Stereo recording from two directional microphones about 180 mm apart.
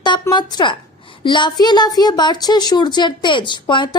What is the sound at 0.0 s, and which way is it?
A woman's voice, 25° left (ahead or behind).